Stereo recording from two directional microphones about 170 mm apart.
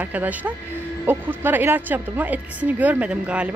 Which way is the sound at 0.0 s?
10° right (ahead or behind).